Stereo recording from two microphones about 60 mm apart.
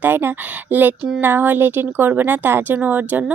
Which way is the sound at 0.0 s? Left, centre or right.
Right.